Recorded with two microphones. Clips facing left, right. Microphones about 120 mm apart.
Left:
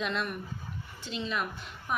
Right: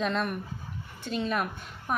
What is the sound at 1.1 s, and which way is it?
Speech, 50° right (ahead or behind).